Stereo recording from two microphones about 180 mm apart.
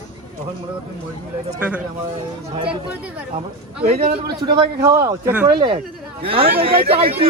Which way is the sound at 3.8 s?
55° right (ahead or behind).